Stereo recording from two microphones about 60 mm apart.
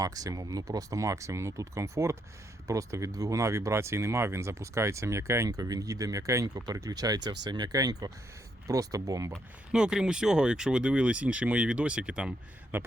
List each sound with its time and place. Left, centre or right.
0.0 s speech: right
8.6 s speech: right
9.7 s speech: centre
12.7 s a man's voice: right